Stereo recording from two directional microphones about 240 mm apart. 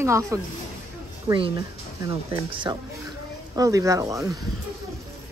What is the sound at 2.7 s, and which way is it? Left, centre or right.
Speech, centre.